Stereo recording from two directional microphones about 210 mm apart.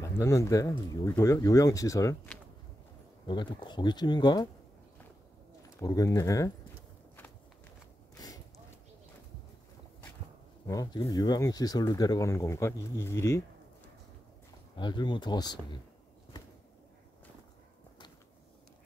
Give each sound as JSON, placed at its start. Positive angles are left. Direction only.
{"t": 0.0, "sound": "speech", "side_deg": 15}
{"t": 5.8, "sound": "speech", "side_deg": 15}
{"t": 10.7, "sound": "speech", "side_deg": 15}
{"t": 14.8, "sound": "speech", "side_deg": 20}